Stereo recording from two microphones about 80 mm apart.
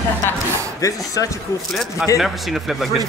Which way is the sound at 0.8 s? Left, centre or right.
Left.